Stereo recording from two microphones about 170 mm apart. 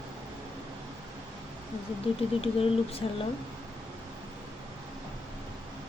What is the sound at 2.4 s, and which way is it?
Speech, 35° left (ahead or behind).